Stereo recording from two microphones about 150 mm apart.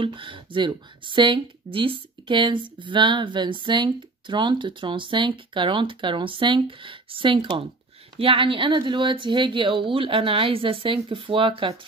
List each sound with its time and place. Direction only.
0.0 s speech: 35° right (ahead or behind)